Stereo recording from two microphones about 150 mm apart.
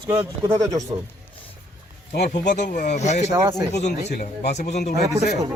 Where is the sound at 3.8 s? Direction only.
50° left (ahead or behind).